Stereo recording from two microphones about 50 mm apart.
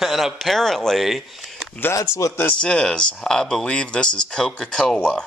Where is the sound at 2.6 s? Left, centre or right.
Centre.